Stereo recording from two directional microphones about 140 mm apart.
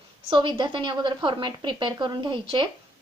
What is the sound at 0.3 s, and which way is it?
A woman's voice, 35° right (ahead or behind).